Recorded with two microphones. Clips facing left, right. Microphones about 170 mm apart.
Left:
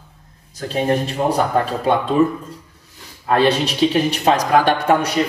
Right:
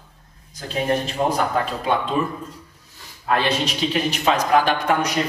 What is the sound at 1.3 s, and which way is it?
Speech, 35° left (ahead or behind).